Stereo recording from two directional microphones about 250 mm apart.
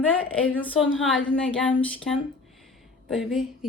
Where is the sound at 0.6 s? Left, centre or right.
Centre.